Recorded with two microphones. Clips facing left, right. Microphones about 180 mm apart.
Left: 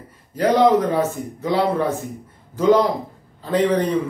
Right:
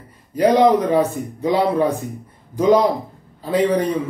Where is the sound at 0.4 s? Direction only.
15° right (ahead or behind).